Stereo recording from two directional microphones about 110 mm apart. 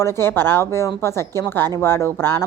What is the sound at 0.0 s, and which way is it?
A woman's voice, 20° left (ahead or behind).